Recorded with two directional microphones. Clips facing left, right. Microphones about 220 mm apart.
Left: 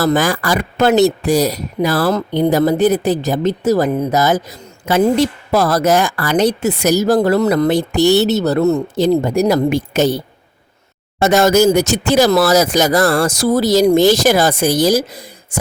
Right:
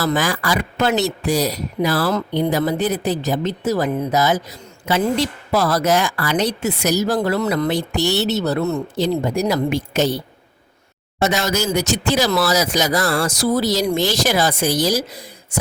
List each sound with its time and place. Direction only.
0.0 s speech: 45° left (ahead or behind)
11.2 s speech: 50° left (ahead or behind)